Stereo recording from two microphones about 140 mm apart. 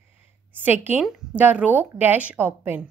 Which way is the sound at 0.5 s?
15° right (ahead or behind).